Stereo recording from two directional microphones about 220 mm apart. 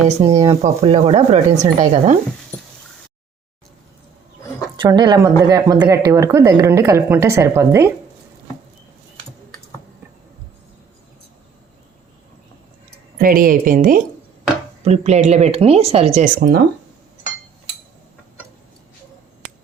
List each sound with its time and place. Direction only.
0.2 s speech: 30° right (ahead or behind)
4.8 s speech: 20° right (ahead or behind)
13.1 s speech: 40° right (ahead or behind)